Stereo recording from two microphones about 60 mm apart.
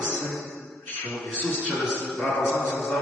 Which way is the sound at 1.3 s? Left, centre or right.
Left.